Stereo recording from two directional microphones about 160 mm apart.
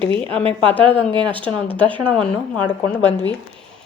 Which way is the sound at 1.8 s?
30° right (ahead or behind).